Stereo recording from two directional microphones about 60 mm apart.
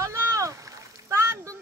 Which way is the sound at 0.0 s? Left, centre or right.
Right.